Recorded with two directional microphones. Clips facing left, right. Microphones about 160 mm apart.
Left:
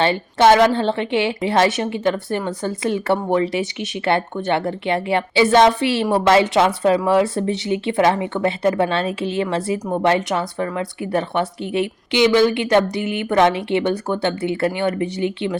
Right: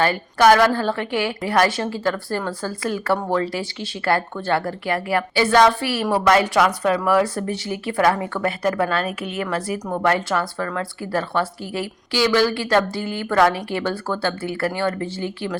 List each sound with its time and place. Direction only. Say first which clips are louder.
0.0 s speech: left 1 dB; 25° left (ahead or behind)